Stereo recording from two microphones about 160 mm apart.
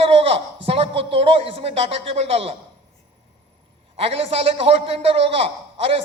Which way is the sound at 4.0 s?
40° right (ahead or behind).